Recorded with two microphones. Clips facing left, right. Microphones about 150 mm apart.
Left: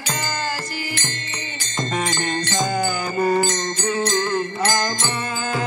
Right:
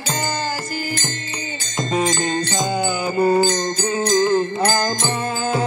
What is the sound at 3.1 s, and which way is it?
Mantra, 15° right (ahead or behind).